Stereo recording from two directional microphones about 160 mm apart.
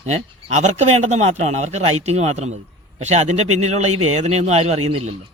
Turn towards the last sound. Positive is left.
turn(degrees=-40)  # may be behind; listen again after turning